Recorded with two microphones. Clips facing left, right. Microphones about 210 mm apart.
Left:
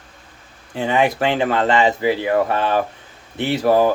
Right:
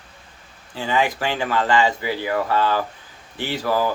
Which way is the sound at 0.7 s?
20° left (ahead or behind).